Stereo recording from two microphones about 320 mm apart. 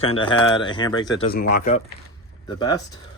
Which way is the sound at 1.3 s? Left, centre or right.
Left.